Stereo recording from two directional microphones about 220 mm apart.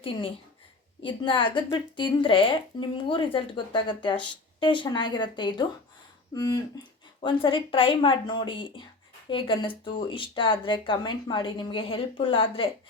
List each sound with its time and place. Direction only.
0.0 s speech: 25° left (ahead or behind)